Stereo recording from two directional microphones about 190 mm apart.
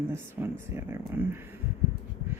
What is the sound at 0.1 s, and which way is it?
Speech, 10° right (ahead or behind).